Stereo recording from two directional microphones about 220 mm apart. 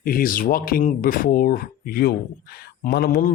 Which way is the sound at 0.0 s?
40° left (ahead or behind).